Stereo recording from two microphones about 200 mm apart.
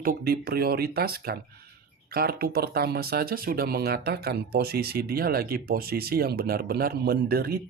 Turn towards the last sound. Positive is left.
turn(degrees=-50)  # may be behind; listen again after turning